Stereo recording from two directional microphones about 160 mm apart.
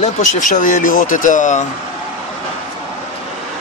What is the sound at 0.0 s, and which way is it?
Speech, 50° left (ahead or behind).